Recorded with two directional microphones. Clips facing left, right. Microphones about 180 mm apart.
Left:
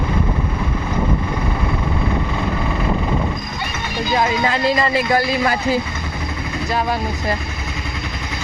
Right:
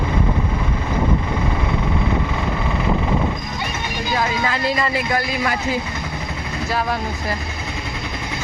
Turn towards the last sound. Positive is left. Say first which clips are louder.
# left 2 dB
turn(degrees=0)  # may be behind; listen again after turning